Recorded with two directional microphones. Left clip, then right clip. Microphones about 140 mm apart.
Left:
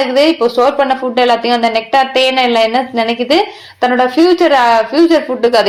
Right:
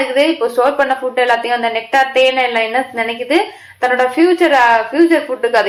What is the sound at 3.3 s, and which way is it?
A woman's voice, 30° left (ahead or behind).